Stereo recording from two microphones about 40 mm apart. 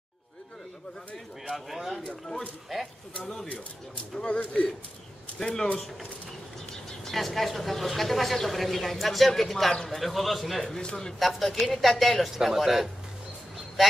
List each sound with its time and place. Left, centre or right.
1.7 s speech: centre
4.3 s speech: left
5.4 s speech: centre
6.7 s speech: centre
10.8 s speech: centre
11.1 s speech: centre